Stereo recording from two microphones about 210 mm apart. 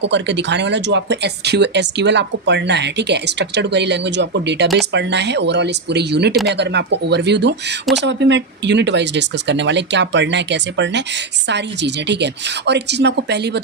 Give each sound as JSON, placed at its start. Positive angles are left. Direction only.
{"t": 0.0, "sound": "speech", "side_deg": -55}